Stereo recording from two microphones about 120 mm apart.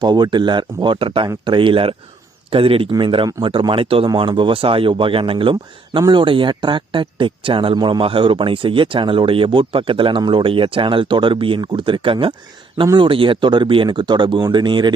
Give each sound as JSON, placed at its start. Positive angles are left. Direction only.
{"t": 0.0, "sound": "speech", "side_deg": -35}